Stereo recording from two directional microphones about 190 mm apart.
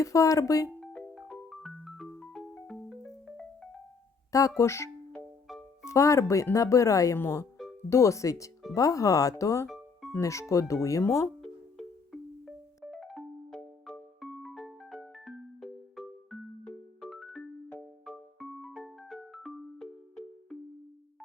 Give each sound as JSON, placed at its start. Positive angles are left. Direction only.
{"t": 0.0, "sound": "speech", "side_deg": 15}
{"t": 0.8, "sound": "marimba", "side_deg": 5}
{"t": 4.3, "sound": "music", "side_deg": 15}
{"t": 5.8, "sound": "speech", "side_deg": 15}
{"t": 9.6, "sound": "music", "side_deg": 0}
{"t": 10.2, "sound": "speech", "side_deg": 15}
{"t": 11.3, "sound": "music", "side_deg": 0}